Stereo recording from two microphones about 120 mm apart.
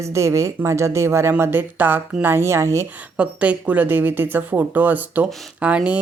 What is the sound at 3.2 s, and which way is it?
A woman's voice, 10° right (ahead or behind).